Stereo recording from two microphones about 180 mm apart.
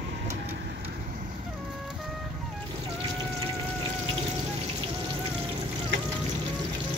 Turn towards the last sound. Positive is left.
turn(degrees=-90)